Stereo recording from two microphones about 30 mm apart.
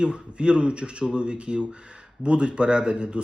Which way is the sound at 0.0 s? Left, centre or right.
Right.